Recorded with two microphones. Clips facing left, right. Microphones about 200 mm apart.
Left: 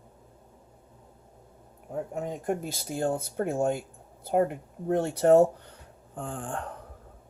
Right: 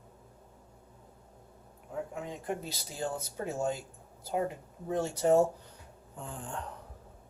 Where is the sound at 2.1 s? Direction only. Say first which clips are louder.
Left 9 dB; 45° left (ahead or behind).